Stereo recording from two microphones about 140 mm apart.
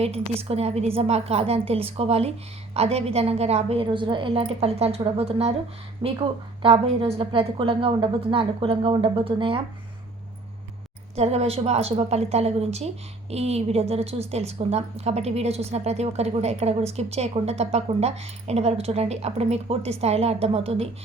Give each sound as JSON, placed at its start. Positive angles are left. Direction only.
{"t": 0.0, "sound": "a woman's voice", "side_deg": -45}
{"t": 11.1, "sound": "a woman's voice", "side_deg": -50}